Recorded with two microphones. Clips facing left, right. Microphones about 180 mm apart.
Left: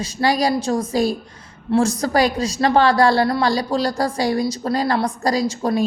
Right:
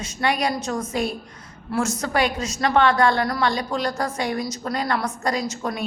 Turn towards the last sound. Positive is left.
turn(degrees=30)  # may be behind; listen again after turning